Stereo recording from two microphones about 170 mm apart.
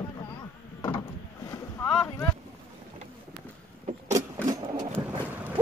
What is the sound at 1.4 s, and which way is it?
Boat, 20° left (ahead or behind).